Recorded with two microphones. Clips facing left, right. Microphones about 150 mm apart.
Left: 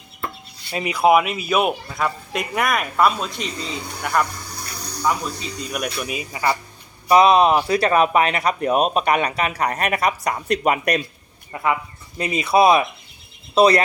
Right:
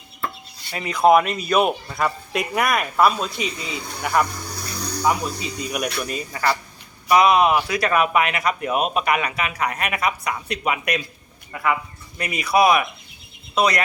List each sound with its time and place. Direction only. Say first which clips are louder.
0.7 s speech: left 4 dB; 20° left (ahead or behind)
0.9 s speech: right 1 dB; 5° left (ahead or behind)
6.0 s speech: even; 10° left (ahead or behind)
7.1 s speech: left 2 dB; 30° left (ahead or behind)
11.5 s speech: left 1 dB; 30° left (ahead or behind)